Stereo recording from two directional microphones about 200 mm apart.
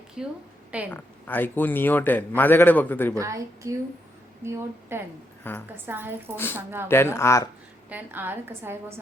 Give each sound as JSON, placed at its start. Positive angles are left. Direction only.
{"t": 0.2, "sound": "a woman's voice", "side_deg": -5}
{"t": 0.9, "sound": "a man's voice", "side_deg": 10}
{"t": 3.2, "sound": "a woman's voice", "side_deg": -15}
{"t": 5.4, "sound": "a woman's voice", "side_deg": 10}
{"t": 5.7, "sound": "a woman's voice", "side_deg": -10}
{"t": 6.3, "sound": "a man's voice", "side_deg": 10}
{"t": 7.9, "sound": "a woman's voice", "side_deg": -10}